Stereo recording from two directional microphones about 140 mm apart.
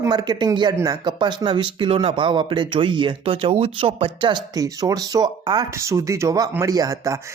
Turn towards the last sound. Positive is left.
turn(degrees=-25)  # may be behind; listen again after turning